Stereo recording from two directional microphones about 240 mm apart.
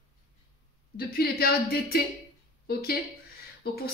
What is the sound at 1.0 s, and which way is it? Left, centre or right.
Speech, left.